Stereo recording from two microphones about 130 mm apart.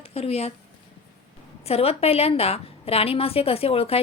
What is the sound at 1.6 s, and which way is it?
A woman's voice, 50° left (ahead or behind).